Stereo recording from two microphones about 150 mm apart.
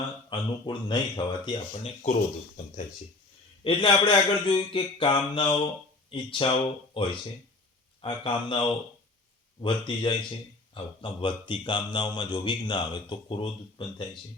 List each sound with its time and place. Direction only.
0.3 s speech: 30° left (ahead or behind)
1.7 s speech: 45° left (ahead or behind)
3.6 s speech: 35° left (ahead or behind)
8.0 s speech: 35° left (ahead or behind)